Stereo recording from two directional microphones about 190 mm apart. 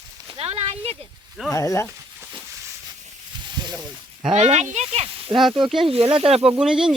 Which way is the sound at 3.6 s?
25° right (ahead or behind).